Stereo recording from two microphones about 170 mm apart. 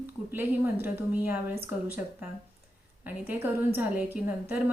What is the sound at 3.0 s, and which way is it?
A woman's voice, 10° right (ahead or behind).